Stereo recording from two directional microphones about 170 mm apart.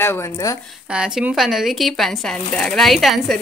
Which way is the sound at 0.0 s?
15° left (ahead or behind).